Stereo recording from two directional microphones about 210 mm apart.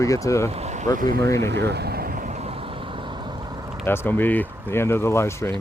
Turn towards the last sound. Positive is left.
turn(degrees=15)  # may be behind; listen again after turning